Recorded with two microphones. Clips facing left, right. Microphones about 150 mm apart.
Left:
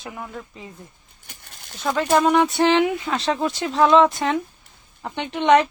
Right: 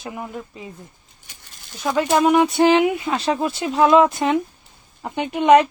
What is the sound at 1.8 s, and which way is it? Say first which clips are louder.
Speech: right 1 dB; 5° right (ahead or behind).